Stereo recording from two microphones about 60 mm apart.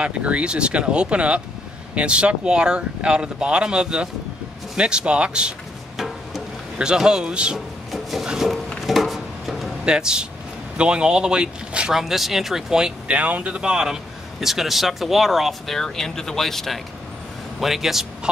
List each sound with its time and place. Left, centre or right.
0.0 s speech: right
5.9 s music: centre
6.8 s speech: centre
7.9 s rub: centre
8.3 s speech: centre
8.8 s a sound: centre
9.8 s speech: centre
11.9 s speech: centre
13.1 s speech: right
13.6 s speech: centre